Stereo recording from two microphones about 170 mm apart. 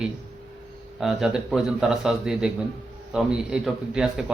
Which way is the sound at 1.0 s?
Centre (ahead or behind).